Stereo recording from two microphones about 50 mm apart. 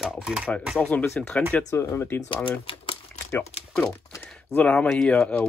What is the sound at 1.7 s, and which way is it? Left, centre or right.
Speech, left.